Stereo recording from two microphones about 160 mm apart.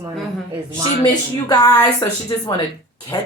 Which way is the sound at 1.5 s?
25° left (ahead or behind).